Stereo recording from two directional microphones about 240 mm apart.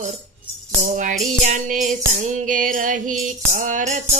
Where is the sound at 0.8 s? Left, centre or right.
Right.